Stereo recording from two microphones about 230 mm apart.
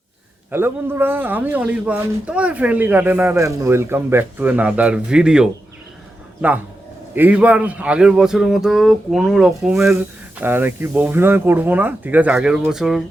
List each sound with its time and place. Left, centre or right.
0.5 s a man's voice: centre
7.1 s a man's voice: centre